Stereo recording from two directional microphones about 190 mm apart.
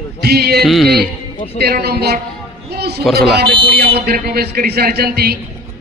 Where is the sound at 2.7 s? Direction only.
55° right (ahead or behind).